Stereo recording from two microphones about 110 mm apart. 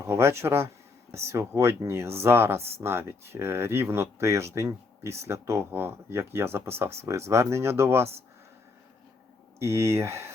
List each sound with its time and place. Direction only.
0.0 s speech: 25° right (ahead or behind)
9.6 s speech: 25° right (ahead or behind)